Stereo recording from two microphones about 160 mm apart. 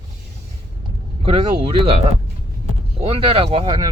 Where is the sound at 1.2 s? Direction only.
35° right (ahead or behind).